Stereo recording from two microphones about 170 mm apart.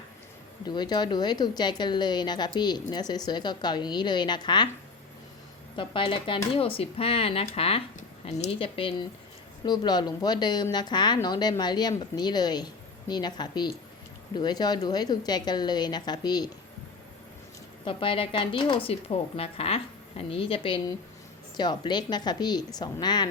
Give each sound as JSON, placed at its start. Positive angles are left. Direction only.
{"t": 0.6, "sound": "a woman's voice", "side_deg": 25}
{"t": 5.7, "sound": "a woman's voice", "side_deg": 30}
{"t": 17.8, "sound": "a woman's voice", "side_deg": 30}